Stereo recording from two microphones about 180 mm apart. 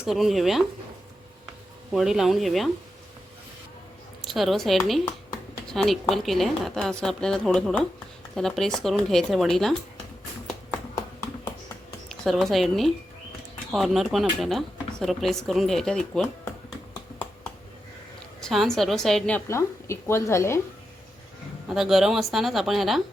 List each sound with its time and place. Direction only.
0.0 s speech: centre (ahead or behind)
1.9 s speech: centre (ahead or behind)
4.2 s speech: centre (ahead or behind)
12.0 s speech: centre (ahead or behind)
18.4 s speech: centre (ahead or behind)
19.5 s a woman's voice: 15° left (ahead or behind)
21.7 s speech: centre (ahead or behind)